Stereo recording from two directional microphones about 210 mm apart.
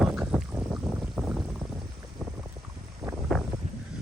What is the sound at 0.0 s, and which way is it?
Boat, centre (ahead or behind).